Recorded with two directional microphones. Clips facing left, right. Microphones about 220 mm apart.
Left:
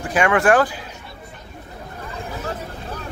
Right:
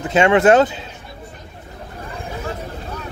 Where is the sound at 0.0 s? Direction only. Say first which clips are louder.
Right 4 dB; 25° right (ahead or behind).